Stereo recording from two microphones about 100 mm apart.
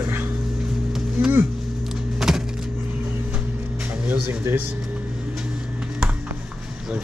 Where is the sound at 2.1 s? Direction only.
5° right (ahead or behind).